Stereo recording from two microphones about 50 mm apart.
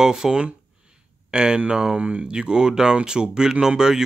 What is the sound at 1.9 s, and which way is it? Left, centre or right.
Speech, right.